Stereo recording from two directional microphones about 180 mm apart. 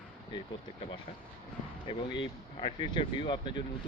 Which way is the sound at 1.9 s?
25° left (ahead or behind).